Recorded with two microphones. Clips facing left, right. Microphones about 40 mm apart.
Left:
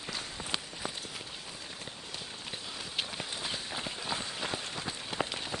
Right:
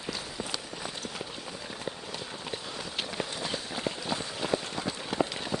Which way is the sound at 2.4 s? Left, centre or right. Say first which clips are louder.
Right 4 dB; centre.